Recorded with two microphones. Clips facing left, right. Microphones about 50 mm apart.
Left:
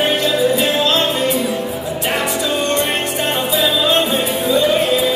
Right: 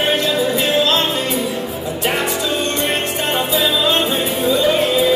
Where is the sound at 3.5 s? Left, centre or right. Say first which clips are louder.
Left 2 dB; centre.